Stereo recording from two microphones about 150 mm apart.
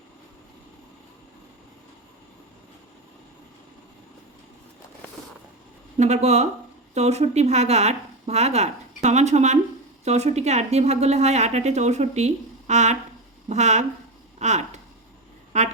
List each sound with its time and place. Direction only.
6.0 s a woman's voice: 50° right (ahead or behind)